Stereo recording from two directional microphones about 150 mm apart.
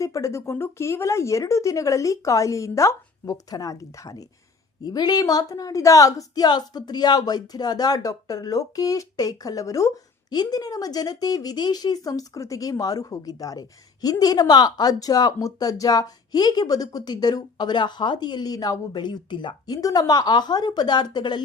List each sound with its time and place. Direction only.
0.0 s a woman's voice: 20° left (ahead or behind)